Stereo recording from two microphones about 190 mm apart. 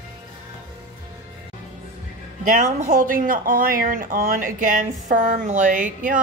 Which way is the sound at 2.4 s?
45° right (ahead or behind).